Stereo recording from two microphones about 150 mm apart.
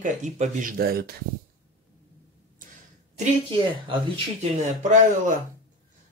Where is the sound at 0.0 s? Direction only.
55° right (ahead or behind); by 1.1 s 90° right.